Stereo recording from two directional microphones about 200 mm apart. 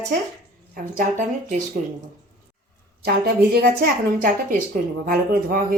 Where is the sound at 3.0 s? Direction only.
55° right (ahead or behind).